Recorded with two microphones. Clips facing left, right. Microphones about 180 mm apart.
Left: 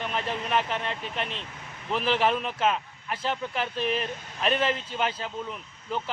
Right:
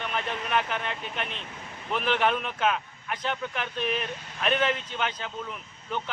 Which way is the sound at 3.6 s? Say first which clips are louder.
Left 3 dB; 35° left (ahead or behind).